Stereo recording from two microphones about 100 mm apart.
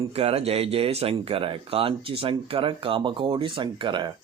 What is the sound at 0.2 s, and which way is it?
Speech, 90° right.